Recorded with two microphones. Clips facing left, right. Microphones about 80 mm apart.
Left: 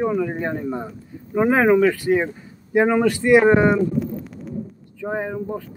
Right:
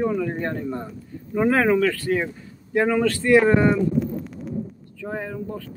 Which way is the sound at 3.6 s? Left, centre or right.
Centre.